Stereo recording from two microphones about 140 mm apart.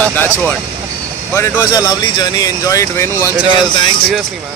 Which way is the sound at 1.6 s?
25° left (ahead or behind).